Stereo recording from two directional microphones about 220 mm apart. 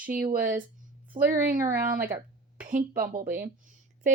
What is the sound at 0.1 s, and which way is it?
A woman's voice, 40° right (ahead or behind).